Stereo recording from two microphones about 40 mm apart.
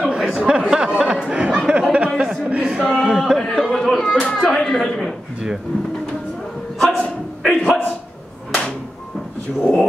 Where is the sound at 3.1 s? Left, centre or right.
Centre.